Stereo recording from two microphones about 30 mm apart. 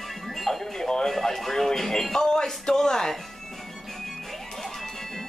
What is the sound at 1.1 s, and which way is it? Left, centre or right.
Speech, centre.